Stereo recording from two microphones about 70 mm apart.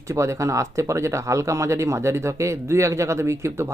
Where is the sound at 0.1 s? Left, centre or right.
Right.